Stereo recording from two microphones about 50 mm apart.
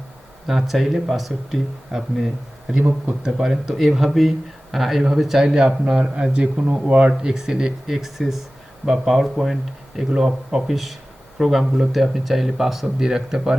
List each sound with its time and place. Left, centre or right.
0.4 s speech: centre